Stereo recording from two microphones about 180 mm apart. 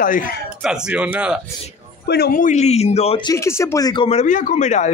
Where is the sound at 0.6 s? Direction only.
5° right (ahead or behind).